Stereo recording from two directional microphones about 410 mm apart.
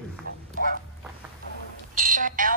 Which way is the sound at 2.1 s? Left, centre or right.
Centre.